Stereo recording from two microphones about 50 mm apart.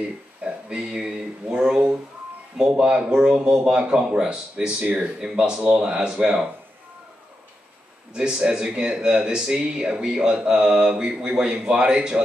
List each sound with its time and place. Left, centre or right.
0.4 s speech: centre
2.8 s speech: centre
8.1 s speech: centre